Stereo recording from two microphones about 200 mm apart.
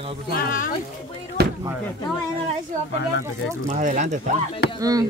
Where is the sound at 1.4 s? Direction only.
55° right (ahead or behind).